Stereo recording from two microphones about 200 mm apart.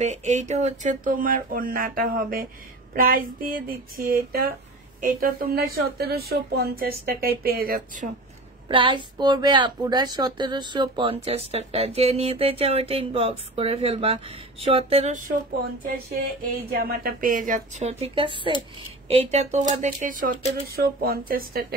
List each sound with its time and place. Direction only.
0.0 s speech: 35° right (ahead or behind)
8.6 s speech: 25° right (ahead or behind)
16.7 s a woman's voice: 50° right (ahead or behind)